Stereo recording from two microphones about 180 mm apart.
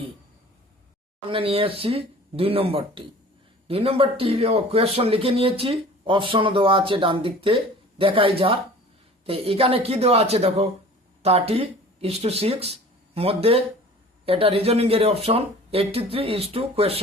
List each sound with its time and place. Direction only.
1.3 s speech: 30° right (ahead or behind)